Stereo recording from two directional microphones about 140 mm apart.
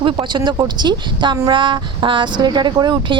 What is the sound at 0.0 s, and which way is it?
Speech, 35° right (ahead or behind).